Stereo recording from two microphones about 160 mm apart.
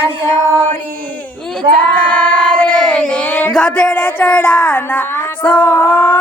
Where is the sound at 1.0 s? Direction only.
10° left (ahead or behind).